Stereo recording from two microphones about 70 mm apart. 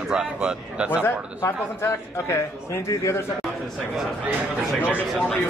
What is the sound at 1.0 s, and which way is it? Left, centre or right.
A man's voice, left.